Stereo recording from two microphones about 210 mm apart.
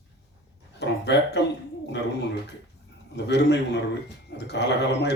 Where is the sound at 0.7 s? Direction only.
55° left (ahead or behind).